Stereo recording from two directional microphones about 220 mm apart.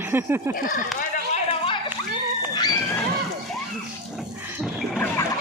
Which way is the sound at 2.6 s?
20° left (ahead or behind).